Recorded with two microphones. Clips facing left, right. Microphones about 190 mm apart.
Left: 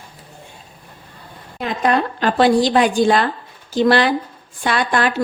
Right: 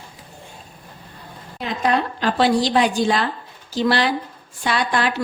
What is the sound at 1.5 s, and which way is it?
A woman's voice, 55° left (ahead or behind).